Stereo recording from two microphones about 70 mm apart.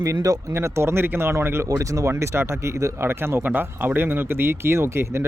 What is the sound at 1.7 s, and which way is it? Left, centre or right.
Speech, right.